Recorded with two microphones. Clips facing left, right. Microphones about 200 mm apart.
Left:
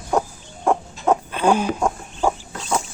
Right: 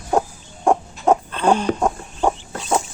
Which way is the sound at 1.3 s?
10° left (ahead or behind).